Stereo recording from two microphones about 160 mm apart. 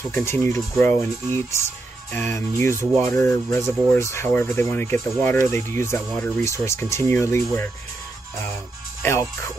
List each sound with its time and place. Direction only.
0.1 s speech: 15° left (ahead or behind)
9.0 s speech: 15° left (ahead or behind)